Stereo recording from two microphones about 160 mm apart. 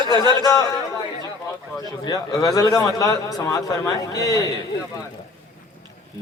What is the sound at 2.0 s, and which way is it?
A man's voice, 20° left (ahead or behind).